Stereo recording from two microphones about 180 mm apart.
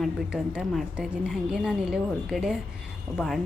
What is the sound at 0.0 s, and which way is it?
A woman's voice, 5° right (ahead or behind).